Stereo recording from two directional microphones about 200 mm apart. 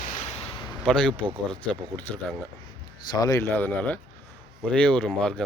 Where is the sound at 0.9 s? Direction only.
5° left (ahead or behind).